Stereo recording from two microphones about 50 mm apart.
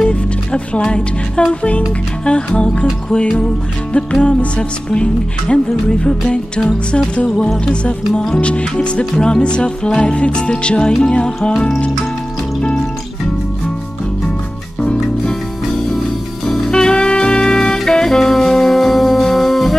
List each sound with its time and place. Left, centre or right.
0.0 s music: centre
7.6 s music: left
14.8 s music: centre
16.4 s music: centre